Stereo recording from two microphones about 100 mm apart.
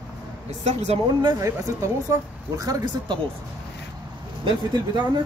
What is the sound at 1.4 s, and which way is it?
Speech, 30° right (ahead or behind).